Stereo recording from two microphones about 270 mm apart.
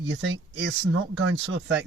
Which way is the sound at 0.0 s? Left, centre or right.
Right.